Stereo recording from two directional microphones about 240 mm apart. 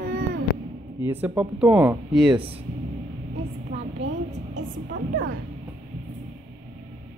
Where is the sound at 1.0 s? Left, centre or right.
Centre.